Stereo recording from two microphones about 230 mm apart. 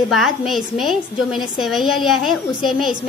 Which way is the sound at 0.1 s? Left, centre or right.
Centre.